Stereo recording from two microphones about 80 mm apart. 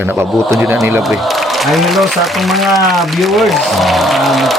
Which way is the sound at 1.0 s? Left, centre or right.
Centre.